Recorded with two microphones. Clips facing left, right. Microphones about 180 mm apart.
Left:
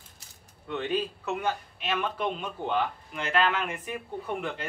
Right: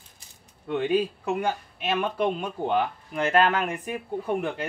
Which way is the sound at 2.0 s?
45° right (ahead or behind).